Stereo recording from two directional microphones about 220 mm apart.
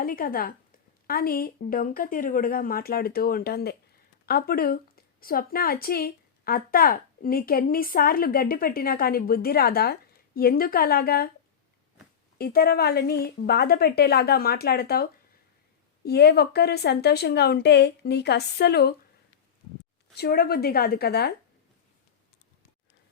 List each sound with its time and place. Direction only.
0.0 s a woman's voice: 40° left (ahead or behind)
12.4 s a woman's voice: 45° left (ahead or behind)
16.0 s a woman's voice: 45° left (ahead or behind)
20.1 s a woman's voice: 45° left (ahead or behind)